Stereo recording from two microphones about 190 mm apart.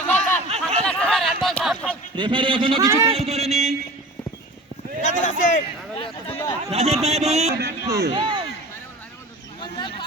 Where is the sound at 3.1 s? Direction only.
30° right (ahead or behind).